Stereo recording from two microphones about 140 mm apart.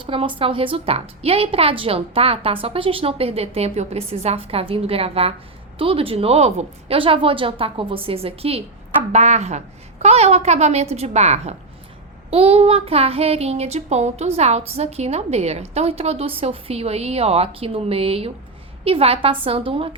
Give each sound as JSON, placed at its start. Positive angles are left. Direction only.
{"t": 0.0, "sound": "child singing", "side_deg": -40}